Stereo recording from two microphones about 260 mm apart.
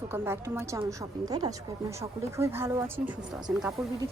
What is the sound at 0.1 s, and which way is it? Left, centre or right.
A woman's voice, centre.